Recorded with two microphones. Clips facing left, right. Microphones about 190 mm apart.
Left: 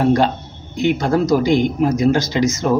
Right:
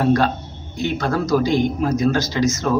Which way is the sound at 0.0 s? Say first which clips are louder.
Left 2 dB; 20° left (ahead or behind).